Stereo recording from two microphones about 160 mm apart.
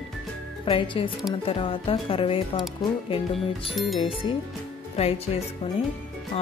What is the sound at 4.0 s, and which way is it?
Music, 35° left (ahead or behind).